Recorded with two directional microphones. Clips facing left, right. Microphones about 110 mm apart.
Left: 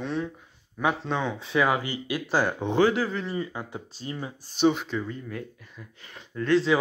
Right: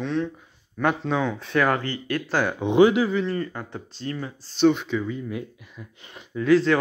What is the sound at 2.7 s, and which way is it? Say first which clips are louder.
Speech: right 7 dB; 15° right (ahead or behind).